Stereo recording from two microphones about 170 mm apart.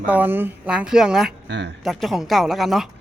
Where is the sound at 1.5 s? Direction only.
90° right.